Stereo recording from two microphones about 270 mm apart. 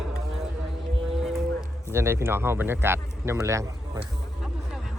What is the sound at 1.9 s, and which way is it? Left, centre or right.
Speech, centre.